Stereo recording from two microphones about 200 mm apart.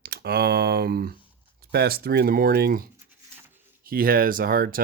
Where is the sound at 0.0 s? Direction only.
50° right (ahead or behind).